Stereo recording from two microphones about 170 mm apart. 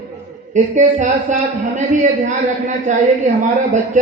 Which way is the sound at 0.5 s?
45° right (ahead or behind).